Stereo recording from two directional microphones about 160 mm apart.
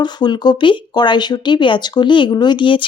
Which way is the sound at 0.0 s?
25° left (ahead or behind).